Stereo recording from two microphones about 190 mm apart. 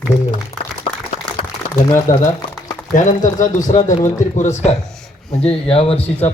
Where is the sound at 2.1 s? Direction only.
45° left (ahead or behind).